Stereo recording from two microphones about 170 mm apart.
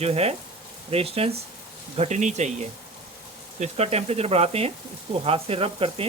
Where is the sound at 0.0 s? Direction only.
35° right (ahead or behind).